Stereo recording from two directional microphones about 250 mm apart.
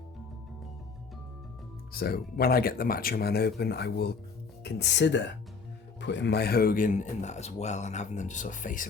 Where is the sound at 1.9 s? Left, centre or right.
Left.